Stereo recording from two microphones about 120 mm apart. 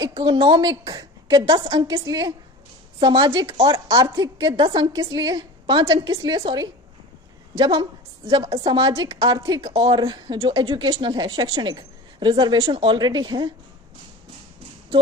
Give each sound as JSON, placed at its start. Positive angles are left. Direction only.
{"t": 0.2, "sound": "a woman's voice", "side_deg": -40}
{"t": 1.8, "sound": "a woman's voice", "side_deg": -35}